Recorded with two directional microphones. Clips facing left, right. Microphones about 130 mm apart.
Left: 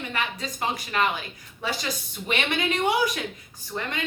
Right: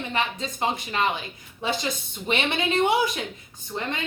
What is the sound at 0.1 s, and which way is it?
A woman's voice, 25° right (ahead or behind).